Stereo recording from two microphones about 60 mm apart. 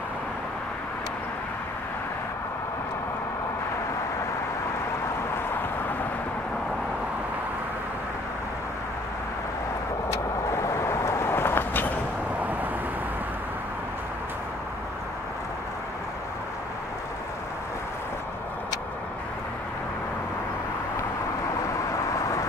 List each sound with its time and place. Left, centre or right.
10.6 s vehicle: left